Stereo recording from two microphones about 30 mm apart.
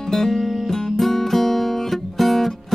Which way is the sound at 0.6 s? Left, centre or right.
Centre.